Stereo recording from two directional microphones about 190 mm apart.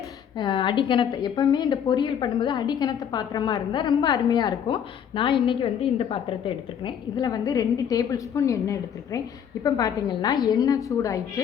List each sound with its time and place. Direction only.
0.3 s a woman's voice: 25° left (ahead or behind)